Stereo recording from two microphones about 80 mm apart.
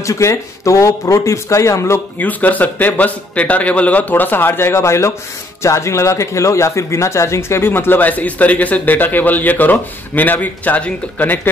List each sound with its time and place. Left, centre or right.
0.0 s speech: left
2.1 s speech: left